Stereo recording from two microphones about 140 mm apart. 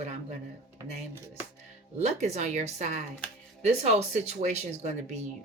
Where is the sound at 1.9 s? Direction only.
55° right (ahead or behind).